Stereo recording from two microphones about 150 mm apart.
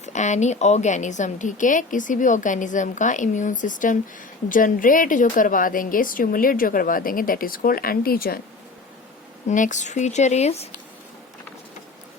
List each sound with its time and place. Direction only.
0.0 s a woman's voice: 50° left (ahead or behind); by 8.4 s 80° left
9.5 s speech: 55° left (ahead or behind)